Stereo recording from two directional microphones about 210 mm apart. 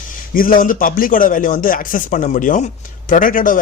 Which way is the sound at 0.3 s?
40° left (ahead or behind).